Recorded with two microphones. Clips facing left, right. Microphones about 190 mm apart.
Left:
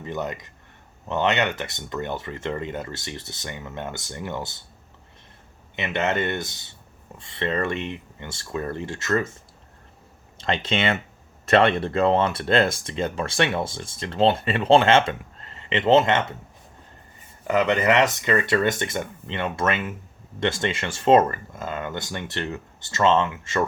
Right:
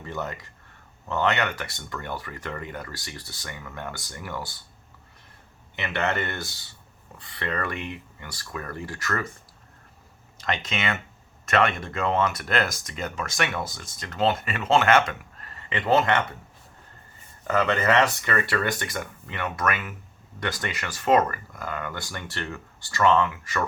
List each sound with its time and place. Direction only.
0.0 s speech: 20° left (ahead or behind)
5.7 s speech: 20° left (ahead or behind)
10.3 s speech: 30° left (ahead or behind)
17.4 s speech: 15° left (ahead or behind)